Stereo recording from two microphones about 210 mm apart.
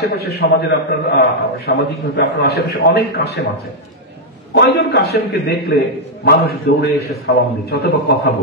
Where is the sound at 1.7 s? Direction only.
50° left (ahead or behind).